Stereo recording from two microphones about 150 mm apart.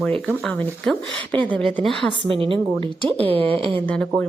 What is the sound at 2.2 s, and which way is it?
Speech, 35° right (ahead or behind).